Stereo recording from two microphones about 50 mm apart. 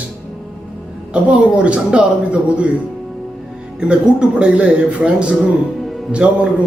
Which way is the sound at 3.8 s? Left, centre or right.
Centre.